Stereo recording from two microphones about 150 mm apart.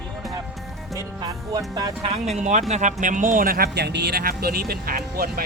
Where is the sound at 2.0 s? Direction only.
45° right (ahead or behind); by 5.4 s 85° right.